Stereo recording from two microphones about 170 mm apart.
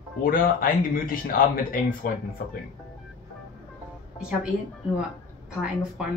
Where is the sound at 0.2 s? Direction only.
55° left (ahead or behind).